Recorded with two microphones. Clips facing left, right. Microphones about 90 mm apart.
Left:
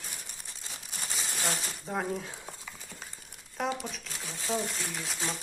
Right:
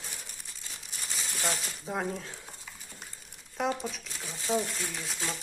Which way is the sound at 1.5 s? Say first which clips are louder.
Right 2 dB; centre (ahead or behind).